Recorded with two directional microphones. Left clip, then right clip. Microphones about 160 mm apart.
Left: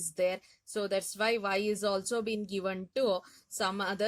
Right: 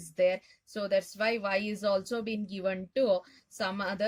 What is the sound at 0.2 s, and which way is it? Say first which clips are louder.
Speech: right 4 dB; 50° left (ahead or behind).